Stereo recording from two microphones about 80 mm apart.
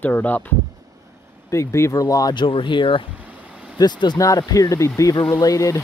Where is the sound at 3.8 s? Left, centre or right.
Left.